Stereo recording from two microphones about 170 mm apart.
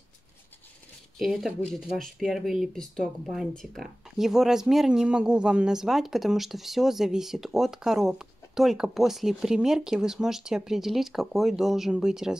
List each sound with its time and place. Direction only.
1.1 s speech: centre (ahead or behind)